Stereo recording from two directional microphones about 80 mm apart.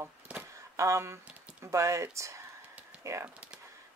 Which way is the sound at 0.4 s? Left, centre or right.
Right.